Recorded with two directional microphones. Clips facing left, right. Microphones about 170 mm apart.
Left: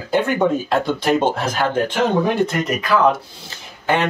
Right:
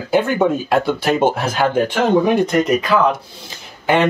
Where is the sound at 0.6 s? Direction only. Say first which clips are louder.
Right 2 dB; 10° right (ahead or behind).